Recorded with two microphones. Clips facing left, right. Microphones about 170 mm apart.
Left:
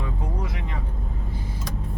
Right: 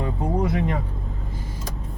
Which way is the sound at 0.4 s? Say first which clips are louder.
Right 10 dB; 55° right (ahead or behind).